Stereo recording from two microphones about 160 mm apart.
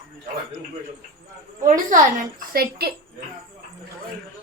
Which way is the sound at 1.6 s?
55° right (ahead or behind).